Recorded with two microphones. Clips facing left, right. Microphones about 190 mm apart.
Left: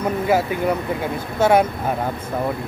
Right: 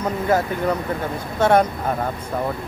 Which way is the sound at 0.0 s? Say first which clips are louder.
Left 1 dB; 10° left (ahead or behind).